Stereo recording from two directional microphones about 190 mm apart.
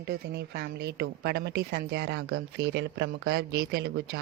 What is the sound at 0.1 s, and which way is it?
A woman's voice, 55° right (ahead or behind).